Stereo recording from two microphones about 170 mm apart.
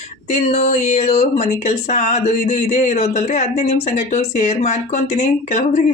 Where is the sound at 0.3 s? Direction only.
45° left (ahead or behind).